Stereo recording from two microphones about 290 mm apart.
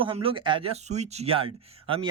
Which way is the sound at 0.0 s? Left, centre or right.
Centre.